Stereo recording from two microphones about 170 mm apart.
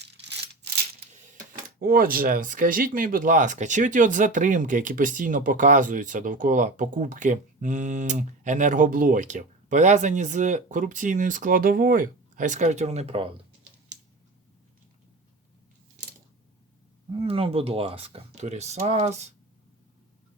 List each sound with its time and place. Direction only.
0.0 s a sound: 80° right
1.1 s coin: 45° right (ahead or behind)
1.8 s speech: 60° right (ahead or behind); by 13.4 s 35° right (ahead or behind)
17.2 s speech: 35° right (ahead or behind)